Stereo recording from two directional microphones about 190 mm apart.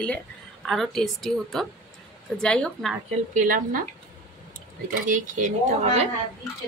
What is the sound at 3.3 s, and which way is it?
Speech, 45° right (ahead or behind).